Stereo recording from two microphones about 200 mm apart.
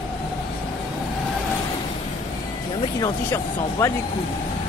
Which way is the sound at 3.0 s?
20° left (ahead or behind).